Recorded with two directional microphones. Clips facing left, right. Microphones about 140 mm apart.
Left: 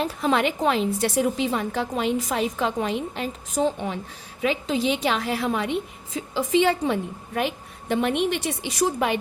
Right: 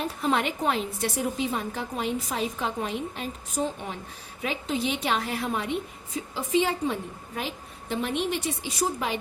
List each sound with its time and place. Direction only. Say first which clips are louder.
0.0 s a woman's voice: left 4 dB; 90° left; by 9.1 s 70° left (ahead or behind)